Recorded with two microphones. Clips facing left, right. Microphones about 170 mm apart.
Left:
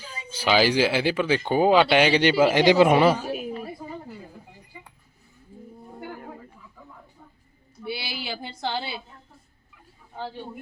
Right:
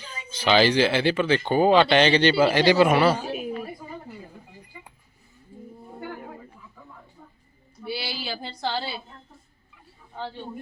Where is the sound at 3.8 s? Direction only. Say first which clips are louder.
Left 2 dB; 25° left (ahead or behind).